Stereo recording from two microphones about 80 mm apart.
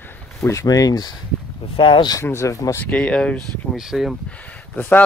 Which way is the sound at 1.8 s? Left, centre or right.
Left.